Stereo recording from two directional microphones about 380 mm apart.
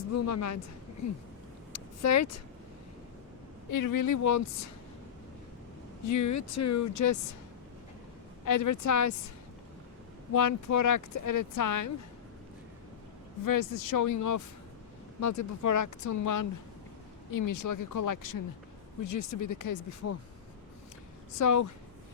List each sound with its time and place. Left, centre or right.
0.1 s speech: left
1.7 s a sound: left
3.7 s speech: left
6.1 s speech: left
8.4 s speech: left
10.3 s speech: left
13.4 s speech: left
21.3 s speech: left